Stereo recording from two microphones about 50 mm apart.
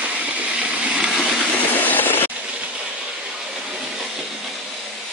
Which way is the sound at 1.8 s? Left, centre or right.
Left.